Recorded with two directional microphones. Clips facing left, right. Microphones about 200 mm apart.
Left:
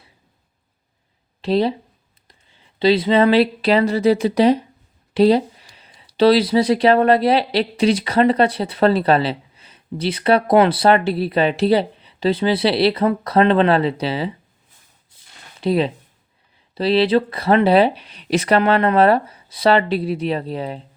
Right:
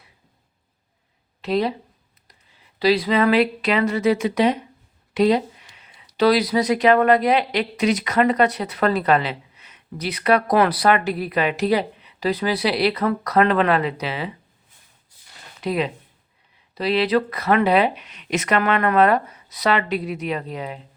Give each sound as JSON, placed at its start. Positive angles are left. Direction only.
{"t": 1.4, "sound": "speech", "side_deg": 30}
{"t": 15.6, "sound": "speech", "side_deg": 30}